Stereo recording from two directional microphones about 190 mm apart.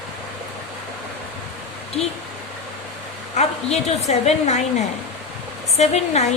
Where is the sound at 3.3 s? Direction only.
35° left (ahead or behind).